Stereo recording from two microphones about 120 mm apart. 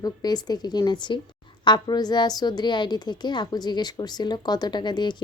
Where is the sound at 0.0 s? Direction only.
35° left (ahead or behind).